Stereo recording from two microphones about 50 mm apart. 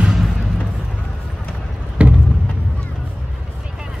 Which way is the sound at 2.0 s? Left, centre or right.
Right.